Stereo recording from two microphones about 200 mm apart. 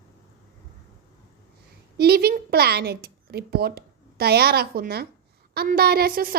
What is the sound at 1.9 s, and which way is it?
A woman's voice, 50° right (ahead or behind).